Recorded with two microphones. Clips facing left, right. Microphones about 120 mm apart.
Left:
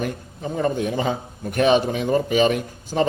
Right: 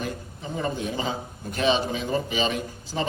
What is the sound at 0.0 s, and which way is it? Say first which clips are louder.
A man's voice: left 5 dB; 50° left (ahead or behind).